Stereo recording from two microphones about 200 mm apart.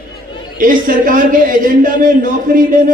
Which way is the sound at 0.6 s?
45° right (ahead or behind).